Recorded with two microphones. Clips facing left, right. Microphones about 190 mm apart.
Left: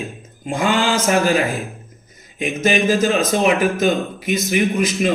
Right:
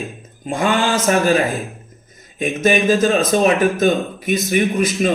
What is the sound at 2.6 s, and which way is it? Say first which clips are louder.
A man's voice: right 2 dB; 15° left (ahead or behind).